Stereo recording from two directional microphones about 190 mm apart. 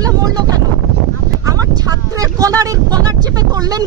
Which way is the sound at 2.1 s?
20° right (ahead or behind).